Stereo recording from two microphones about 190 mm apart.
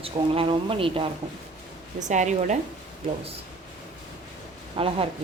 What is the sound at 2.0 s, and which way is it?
Speech, 40° right (ahead or behind).